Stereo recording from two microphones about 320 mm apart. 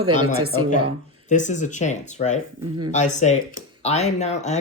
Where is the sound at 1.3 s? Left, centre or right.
Left.